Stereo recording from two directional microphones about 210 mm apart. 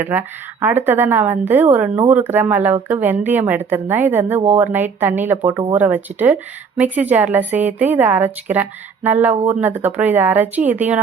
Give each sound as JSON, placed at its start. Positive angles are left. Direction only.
{"t": 0.0, "sound": "speech", "side_deg": -10}